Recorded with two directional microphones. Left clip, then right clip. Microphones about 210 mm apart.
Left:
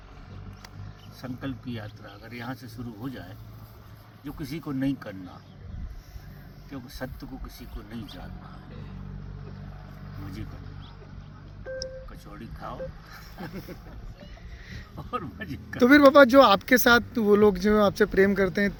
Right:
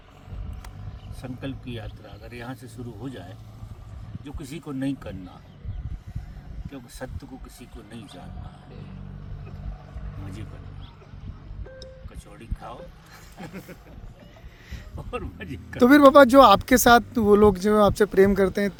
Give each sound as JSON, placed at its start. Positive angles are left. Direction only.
{"t": 1.2, "sound": "speech", "side_deg": -5}
{"t": 6.7, "sound": "speech", "side_deg": -10}
{"t": 15.1, "sound": "speech", "side_deg": -5}
{"t": 15.8, "sound": "speech", "side_deg": -25}